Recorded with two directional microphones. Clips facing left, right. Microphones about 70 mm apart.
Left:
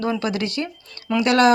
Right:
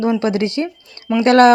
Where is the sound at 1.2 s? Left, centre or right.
Right.